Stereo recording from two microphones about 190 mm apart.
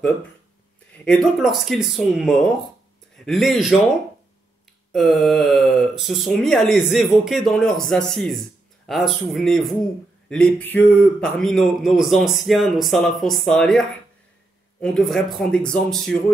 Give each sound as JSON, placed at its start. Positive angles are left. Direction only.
{"t": 1.0, "sound": "a man's voice", "side_deg": 0}
{"t": 4.9, "sound": "a man's voice", "side_deg": 0}